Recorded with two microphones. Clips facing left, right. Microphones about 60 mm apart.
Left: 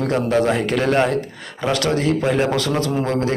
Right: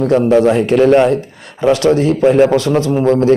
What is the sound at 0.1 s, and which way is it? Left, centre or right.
A man's voice, right.